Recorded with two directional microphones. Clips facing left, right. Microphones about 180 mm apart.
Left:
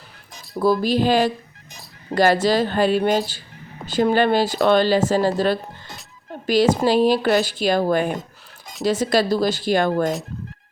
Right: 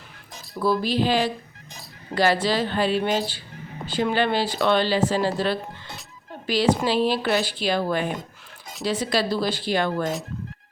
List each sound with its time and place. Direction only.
0.6 s speech: 45° left (ahead or behind)